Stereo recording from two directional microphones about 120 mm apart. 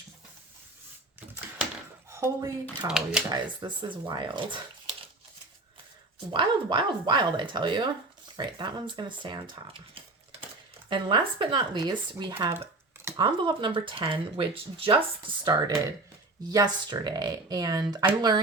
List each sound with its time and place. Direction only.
2.0 s a sound: 20° right (ahead or behind)
2.8 s speech: 5° right (ahead or behind)
3.6 s speech: 40° right (ahead or behind)
6.3 s speech: 40° right (ahead or behind)
10.8 s speech: 45° right (ahead or behind); by 12.6 s 25° right (ahead or behind)
13.1 s speech: 40° right (ahead or behind)
15.4 s speech: 35° right (ahead or behind)